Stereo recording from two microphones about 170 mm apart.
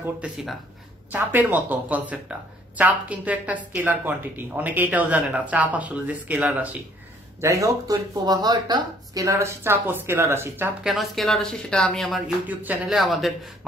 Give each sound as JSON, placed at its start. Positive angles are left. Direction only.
{"t": 0.0, "sound": "a woman's voice", "side_deg": -5}
{"t": 10.9, "sound": "a woman's voice", "side_deg": 0}
{"t": 12.4, "sound": "a woman's voice", "side_deg": -10}